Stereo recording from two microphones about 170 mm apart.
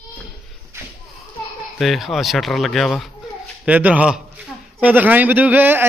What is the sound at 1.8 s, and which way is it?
A man's voice, centre (ahead or behind).